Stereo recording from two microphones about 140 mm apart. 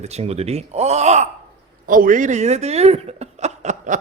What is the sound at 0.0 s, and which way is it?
Speech, 50° right (ahead or behind).